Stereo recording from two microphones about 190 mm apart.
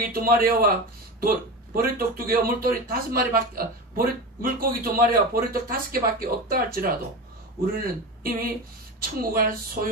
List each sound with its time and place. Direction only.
0.0 s a man's voice: 50° right (ahead or behind)